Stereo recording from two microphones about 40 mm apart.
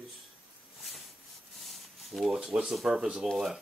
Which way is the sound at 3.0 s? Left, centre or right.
Centre.